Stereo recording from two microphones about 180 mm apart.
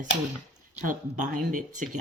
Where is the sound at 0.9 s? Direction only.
45° right (ahead or behind).